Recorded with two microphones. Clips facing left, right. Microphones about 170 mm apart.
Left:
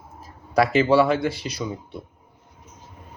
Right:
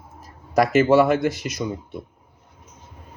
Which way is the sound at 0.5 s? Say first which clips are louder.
Right 2 dB; 45° right (ahead or behind).